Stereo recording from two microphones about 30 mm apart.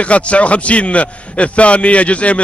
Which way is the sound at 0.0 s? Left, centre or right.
Left.